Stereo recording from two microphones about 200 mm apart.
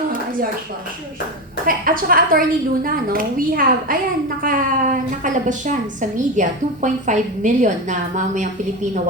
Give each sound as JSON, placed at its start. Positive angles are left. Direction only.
{"t": 1.6, "sound": "a woman's voice", "side_deg": -45}